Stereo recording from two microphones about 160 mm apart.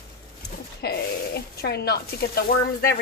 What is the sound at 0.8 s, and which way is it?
Speech, 85° left.